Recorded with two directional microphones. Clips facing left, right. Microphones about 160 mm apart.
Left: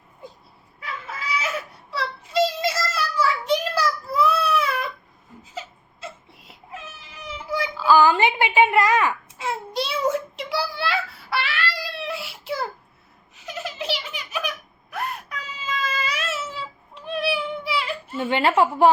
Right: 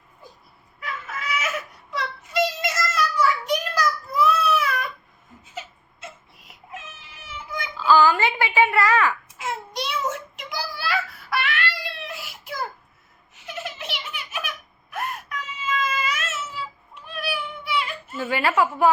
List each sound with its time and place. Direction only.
0.8 s chicken: 30° left (ahead or behind)
1.9 s child singing: 30° left (ahead or behind)
5.5 s crying: 30° left (ahead or behind)
7.8 s wail: 15° left (ahead or behind)
9.4 s a sound: 30° left (ahead or behind)
13.3 s giggle: 35° left (ahead or behind)
15.7 s a sound: 35° left (ahead or behind)